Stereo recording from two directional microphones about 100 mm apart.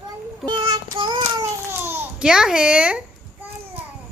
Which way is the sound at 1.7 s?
25° right (ahead or behind).